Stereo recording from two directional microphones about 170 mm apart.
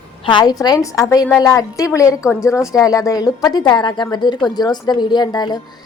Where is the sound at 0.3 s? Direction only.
25° left (ahead or behind).